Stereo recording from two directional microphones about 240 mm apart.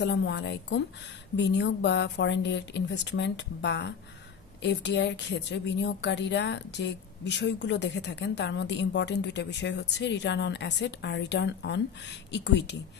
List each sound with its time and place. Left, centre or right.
0.0 s a woman's voice: left